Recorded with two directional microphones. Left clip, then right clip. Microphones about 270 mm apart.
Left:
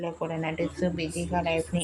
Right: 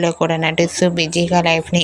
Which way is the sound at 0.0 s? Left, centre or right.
Right.